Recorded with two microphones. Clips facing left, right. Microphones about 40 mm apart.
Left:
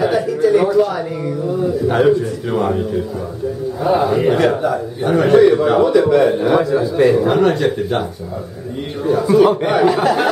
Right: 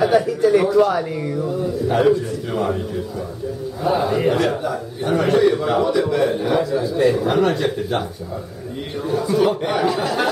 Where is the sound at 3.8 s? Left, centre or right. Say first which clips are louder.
Left 4 dB; centre.